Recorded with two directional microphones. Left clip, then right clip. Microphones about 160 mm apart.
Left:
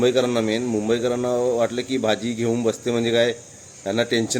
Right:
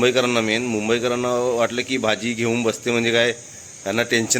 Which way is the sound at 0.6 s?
5° left (ahead or behind).